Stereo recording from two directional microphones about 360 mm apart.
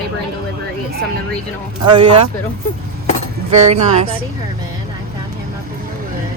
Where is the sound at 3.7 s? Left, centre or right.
Centre.